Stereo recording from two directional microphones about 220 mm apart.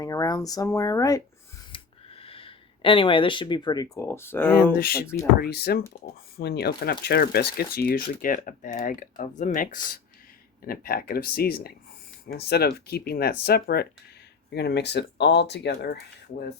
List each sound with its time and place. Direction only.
0.0 s speech: 15° left (ahead or behind)
1.7 s a sound: 25° left (ahead or behind)
3.9 s speech: 10° left (ahead or behind)
4.5 s speech: 40° left (ahead or behind)